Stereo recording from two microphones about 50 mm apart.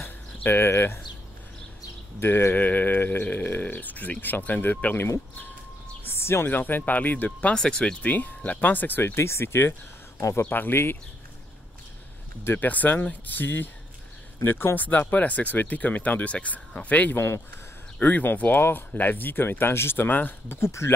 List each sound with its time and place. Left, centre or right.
0.0 s a sound: left
2.1 s speech: left
2.5 s speech: left
6.0 s a sound: left
6.5 s speech: left
7.5 s speech: centre
8.0 s speech: left
9.1 s speech: left
10.4 s speech: left
12.5 s speech: left
14.4 s speech: left
14.8 s speech: left
20.4 s speech: left